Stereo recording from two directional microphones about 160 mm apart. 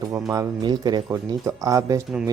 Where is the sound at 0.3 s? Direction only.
25° right (ahead or behind).